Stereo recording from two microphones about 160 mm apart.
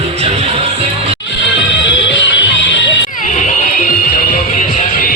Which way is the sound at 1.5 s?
90° left.